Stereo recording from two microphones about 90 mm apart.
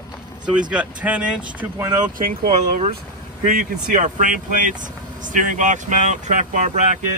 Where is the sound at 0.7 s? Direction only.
15° right (ahead or behind).